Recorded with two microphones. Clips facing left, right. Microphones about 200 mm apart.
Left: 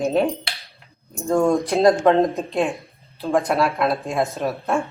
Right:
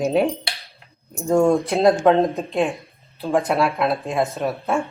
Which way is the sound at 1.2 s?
10° right (ahead or behind).